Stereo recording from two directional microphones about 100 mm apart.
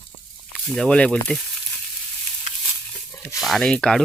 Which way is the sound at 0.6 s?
5° left (ahead or behind).